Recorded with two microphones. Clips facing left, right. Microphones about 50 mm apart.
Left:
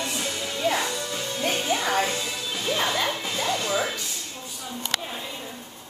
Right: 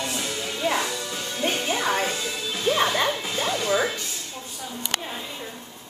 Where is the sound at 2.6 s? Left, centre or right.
Right.